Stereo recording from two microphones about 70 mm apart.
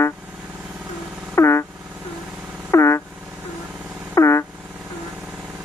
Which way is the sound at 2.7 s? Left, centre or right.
Left.